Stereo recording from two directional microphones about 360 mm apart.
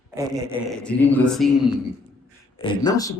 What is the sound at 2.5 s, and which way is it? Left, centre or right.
Speech, centre.